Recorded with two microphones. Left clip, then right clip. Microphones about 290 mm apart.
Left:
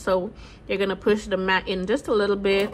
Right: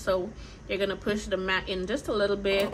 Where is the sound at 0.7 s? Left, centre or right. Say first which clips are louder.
Left 6 dB; centre.